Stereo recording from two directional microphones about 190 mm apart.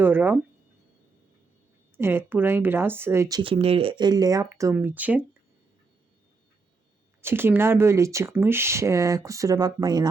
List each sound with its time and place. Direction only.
0.0 s speech: 10° right (ahead or behind)
2.0 s speech: 10° right (ahead or behind)
7.2 s speech: 10° right (ahead or behind)